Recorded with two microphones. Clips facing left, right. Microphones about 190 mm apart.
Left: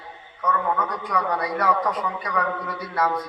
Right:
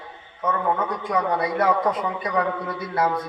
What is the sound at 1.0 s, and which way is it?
A man's voice, 25° right (ahead or behind).